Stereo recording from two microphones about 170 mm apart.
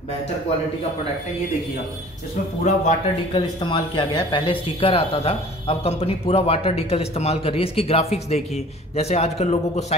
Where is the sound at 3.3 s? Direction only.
25° left (ahead or behind).